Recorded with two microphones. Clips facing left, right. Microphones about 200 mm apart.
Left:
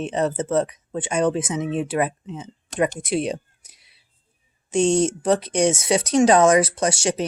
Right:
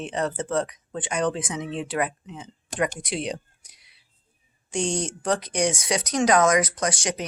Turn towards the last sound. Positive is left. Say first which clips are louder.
# left 5 dB
turn(degrees=25)  # may be behind; listen again after turning